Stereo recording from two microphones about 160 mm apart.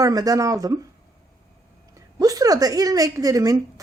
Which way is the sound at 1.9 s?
20° right (ahead or behind).